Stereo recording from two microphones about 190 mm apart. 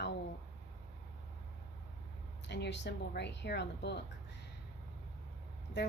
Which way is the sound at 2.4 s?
60° left (ahead or behind).